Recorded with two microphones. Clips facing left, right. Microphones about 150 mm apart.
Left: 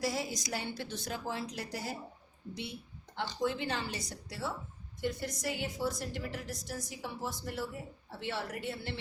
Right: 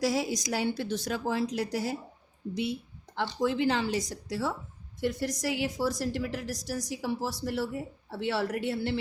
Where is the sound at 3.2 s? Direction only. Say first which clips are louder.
Right 6 dB; 90° right.